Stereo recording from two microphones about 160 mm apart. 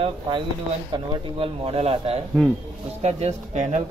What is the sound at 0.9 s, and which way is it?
Speech, 30° right (ahead or behind).